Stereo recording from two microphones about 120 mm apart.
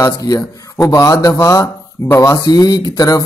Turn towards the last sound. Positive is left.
turn(degrees=30)  # may be behind; listen again after turning